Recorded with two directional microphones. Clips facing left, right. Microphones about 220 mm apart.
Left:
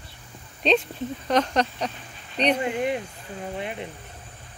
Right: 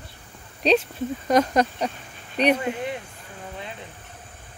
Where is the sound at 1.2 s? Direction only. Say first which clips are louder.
Right 3 dB; 10° right (ahead or behind).